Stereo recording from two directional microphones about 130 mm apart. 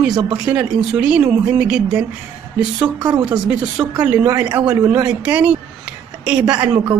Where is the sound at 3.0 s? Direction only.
35° right (ahead or behind).